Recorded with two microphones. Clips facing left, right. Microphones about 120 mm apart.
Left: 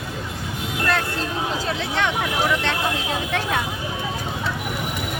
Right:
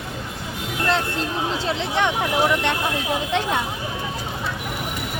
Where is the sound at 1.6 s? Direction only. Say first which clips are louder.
Right 4 dB; 20° right (ahead or behind).